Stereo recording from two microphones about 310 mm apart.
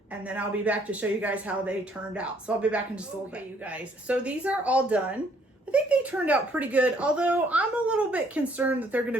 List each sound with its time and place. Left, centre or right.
0.3 s speech: centre